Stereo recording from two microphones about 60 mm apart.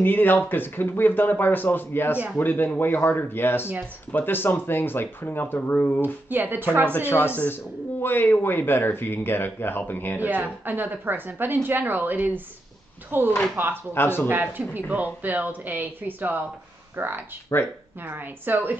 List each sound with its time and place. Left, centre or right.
0.0 s a man's voice: left
6.0 s a woman's voice: right
7.0 s a man's voice: left
10.2 s a woman's voice: right
13.9 s a man's voice: left
14.9 s speech: right
17.5 s speech: left
18.0 s a woman's voice: right